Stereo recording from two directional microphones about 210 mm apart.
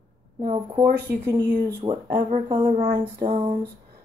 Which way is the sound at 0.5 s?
20° right (ahead or behind).